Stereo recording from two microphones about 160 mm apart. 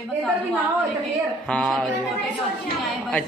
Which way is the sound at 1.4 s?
5° left (ahead or behind).